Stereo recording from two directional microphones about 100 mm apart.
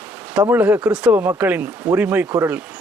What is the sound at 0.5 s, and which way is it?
Speech, 20° right (ahead or behind).